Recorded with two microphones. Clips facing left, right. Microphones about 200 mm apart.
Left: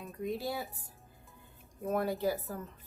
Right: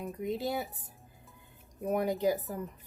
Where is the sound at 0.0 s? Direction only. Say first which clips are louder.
Right 3 dB; 20° right (ahead or behind).